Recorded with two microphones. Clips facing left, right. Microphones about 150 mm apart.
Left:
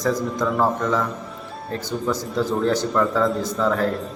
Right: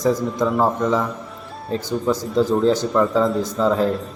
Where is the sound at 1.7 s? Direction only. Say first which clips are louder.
Right 4 dB; 15° right (ahead or behind).